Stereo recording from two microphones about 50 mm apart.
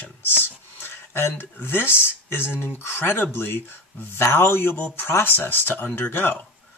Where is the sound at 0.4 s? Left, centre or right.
Left.